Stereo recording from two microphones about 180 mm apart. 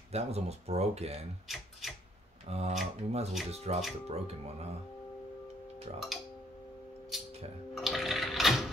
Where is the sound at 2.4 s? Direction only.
35° right (ahead or behind).